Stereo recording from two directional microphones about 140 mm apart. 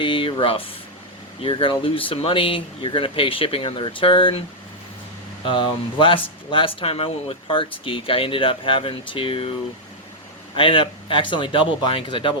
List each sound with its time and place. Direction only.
0.0 s speech: 35° left (ahead or behind)
5.5 s speech: 35° left (ahead or behind)